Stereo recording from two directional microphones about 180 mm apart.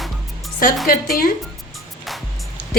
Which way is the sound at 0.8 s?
55° left (ahead or behind).